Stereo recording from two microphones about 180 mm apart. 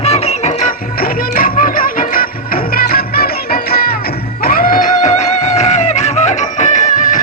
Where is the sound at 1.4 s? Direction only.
50° left (ahead or behind).